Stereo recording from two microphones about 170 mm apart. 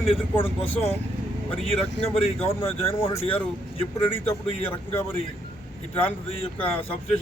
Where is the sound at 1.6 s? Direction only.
35° left (ahead or behind).